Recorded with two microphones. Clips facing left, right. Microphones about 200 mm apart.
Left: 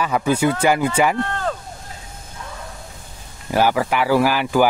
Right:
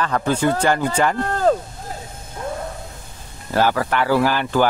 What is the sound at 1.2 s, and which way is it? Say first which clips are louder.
Rowboat: right 6 dB; 40° right (ahead or behind).